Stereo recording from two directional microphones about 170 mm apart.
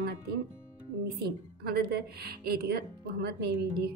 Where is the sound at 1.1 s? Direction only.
65° right (ahead or behind).